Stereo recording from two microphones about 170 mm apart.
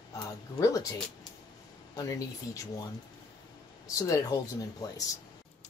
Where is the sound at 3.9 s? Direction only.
20° left (ahead or behind).